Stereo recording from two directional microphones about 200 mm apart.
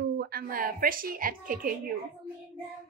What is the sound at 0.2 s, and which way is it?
A woman's voice, 50° right (ahead or behind).